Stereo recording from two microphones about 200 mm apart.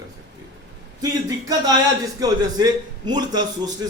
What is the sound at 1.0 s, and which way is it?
A man's voice, 15° right (ahead or behind).